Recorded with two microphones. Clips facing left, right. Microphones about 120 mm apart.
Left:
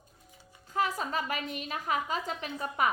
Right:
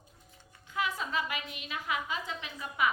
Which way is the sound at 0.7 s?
40° left (ahead or behind).